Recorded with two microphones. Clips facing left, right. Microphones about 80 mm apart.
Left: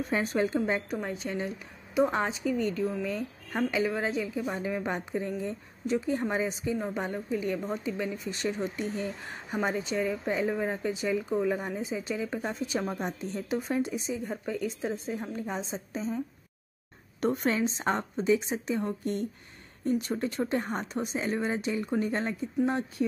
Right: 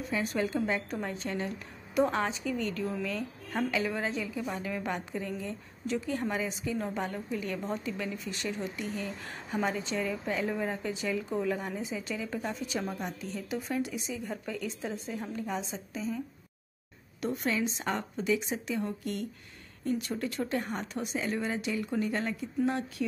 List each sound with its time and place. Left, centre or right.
0.1 s speech: left
0.8 s a woman's voice: centre; by 9.6 s left
9.6 s speech: centre
17.2 s a woman's voice: left